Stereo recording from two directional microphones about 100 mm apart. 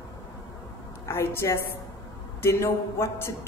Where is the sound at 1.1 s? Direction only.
25° left (ahead or behind).